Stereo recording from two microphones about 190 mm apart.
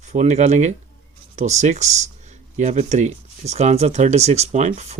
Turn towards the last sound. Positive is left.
turn(degrees=-35)  # may be behind; listen again after turning